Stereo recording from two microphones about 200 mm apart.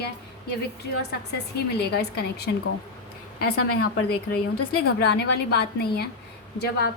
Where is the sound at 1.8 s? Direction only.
55° left (ahead or behind).